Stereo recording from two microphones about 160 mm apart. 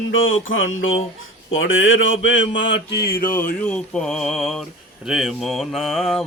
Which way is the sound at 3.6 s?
5° left (ahead or behind).